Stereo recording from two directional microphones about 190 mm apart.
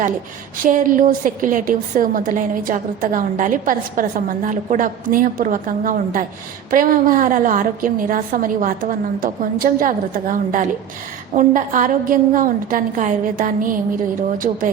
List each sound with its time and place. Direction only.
0.6 s a woman's voice: 45° right (ahead or behind)